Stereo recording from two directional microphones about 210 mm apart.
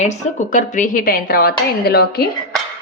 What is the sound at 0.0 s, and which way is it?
A woman's voice, 35° left (ahead or behind).